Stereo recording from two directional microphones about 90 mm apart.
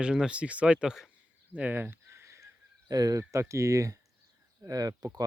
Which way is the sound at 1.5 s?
20° right (ahead or behind).